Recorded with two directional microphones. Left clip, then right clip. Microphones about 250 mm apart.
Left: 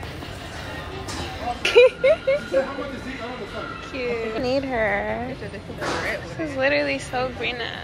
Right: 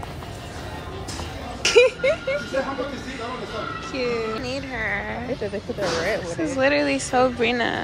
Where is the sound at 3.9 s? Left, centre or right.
Centre.